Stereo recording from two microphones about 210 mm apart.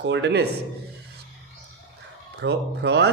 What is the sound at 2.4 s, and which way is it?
Speech, 55° right (ahead or behind).